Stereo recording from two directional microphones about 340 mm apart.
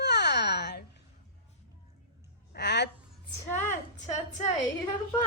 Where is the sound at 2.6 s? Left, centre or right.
Left.